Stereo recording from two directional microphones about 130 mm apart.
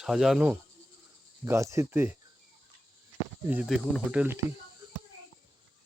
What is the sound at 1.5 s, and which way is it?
Speech, 20° right (ahead or behind).